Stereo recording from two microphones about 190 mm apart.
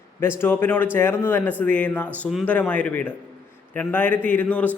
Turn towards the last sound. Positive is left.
turn(degrees=10)  # may be behind; listen again after turning